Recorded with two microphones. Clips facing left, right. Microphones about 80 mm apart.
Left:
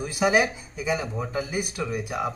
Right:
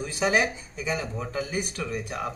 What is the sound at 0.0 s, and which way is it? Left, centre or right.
Speech, centre.